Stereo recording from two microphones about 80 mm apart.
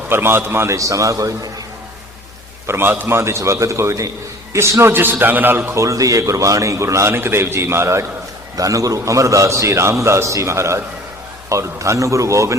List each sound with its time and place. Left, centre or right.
0.1 s a man's voice: right
2.6 s a man's voice: right
8.5 s a man's voice: right